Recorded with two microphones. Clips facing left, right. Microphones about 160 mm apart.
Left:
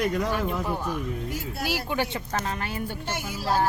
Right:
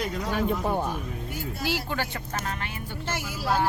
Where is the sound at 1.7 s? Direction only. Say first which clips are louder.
Left 3 dB; 15° left (ahead or behind); by 2.8 s 35° left (ahead or behind).